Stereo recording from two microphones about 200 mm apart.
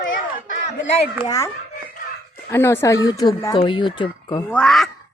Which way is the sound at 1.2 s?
15° left (ahead or behind).